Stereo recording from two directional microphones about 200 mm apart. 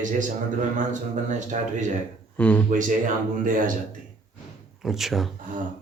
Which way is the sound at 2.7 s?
40° right (ahead or behind).